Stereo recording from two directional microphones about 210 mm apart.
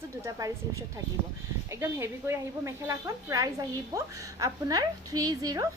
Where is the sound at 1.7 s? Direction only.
10° right (ahead or behind).